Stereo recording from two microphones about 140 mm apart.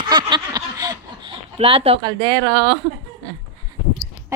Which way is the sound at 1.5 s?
45° right (ahead or behind).